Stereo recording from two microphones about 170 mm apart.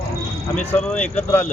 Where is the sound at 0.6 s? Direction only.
10° left (ahead or behind).